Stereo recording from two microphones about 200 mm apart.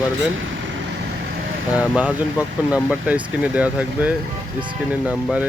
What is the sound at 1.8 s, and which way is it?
Speech, 5° right (ahead or behind).